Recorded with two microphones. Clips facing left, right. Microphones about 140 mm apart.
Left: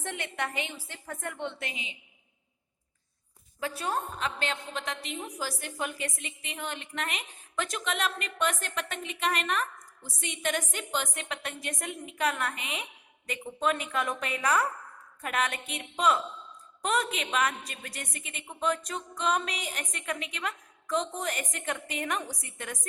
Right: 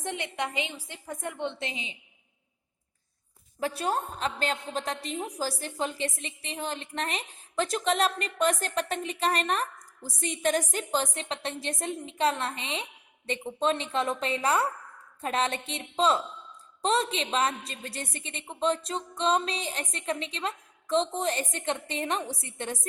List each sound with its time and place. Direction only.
0.0 s a woman's voice: 15° right (ahead or behind)
3.6 s a woman's voice: 35° right (ahead or behind)